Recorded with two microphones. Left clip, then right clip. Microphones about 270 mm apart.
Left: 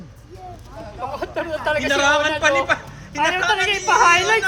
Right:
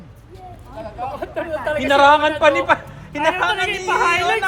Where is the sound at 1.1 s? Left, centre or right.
Left.